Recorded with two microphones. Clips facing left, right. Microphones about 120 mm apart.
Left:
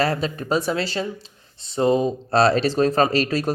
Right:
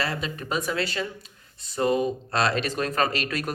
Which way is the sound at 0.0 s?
40° left (ahead or behind).